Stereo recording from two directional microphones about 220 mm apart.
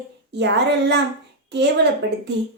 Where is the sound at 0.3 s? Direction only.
50° right (ahead or behind).